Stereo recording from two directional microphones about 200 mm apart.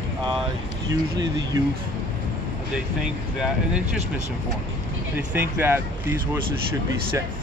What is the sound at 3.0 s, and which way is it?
Speech, 5° right (ahead or behind).